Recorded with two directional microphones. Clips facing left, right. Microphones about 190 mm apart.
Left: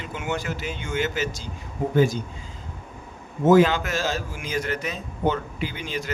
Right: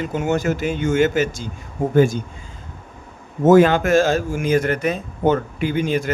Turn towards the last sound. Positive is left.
turn(degrees=-50)  # may be behind; listen again after turning